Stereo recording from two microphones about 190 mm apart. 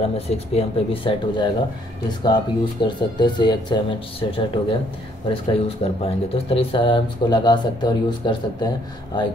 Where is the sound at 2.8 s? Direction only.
25° left (ahead or behind).